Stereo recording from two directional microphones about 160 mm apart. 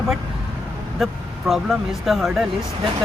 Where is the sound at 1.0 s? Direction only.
Centre (ahead or behind).